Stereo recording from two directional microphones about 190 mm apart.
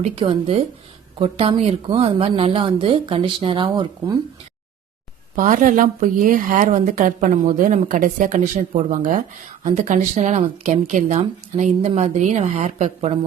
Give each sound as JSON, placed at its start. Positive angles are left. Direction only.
{"t": 0.0, "sound": "a woman's voice", "side_deg": -30}
{"t": 5.3, "sound": "speech", "side_deg": -45}